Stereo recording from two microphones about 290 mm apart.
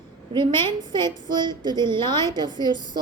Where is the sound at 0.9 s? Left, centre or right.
Centre.